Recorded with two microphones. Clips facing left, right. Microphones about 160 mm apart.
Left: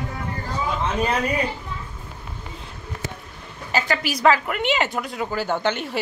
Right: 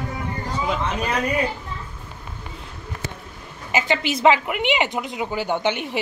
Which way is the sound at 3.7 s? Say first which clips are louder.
Right 2 dB; 25° right (ahead or behind).